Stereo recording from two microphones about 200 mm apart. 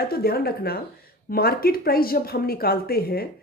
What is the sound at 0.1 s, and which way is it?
Speech, 50° left (ahead or behind).